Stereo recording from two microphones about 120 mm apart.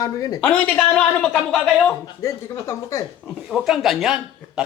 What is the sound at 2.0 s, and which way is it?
Speech, 25° left (ahead or behind).